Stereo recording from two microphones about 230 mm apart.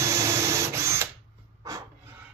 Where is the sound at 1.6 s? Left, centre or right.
Centre.